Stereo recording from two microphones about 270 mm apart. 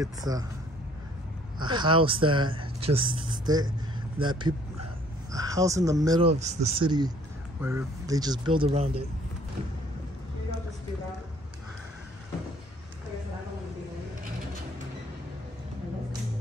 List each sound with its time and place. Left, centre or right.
0.0 s speech: centre
1.6 s speech: centre